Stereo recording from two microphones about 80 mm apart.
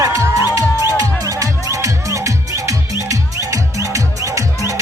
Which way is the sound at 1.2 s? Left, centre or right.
Right.